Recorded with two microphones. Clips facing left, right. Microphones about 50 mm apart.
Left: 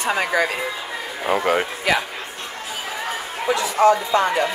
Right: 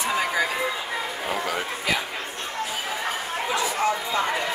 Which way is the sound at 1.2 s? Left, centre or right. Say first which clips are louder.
Left 11 dB; left.